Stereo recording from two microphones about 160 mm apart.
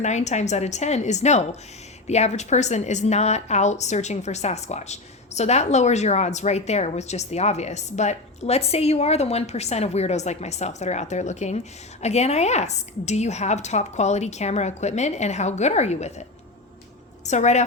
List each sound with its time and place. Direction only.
0.0 s a woman's voice: 45° left (ahead or behind)
17.2 s a woman's voice: 45° left (ahead or behind)